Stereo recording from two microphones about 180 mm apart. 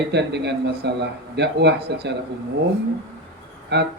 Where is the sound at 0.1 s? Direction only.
70° right (ahead or behind).